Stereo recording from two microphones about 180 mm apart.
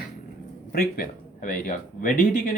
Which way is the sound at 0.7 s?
55° left (ahead or behind).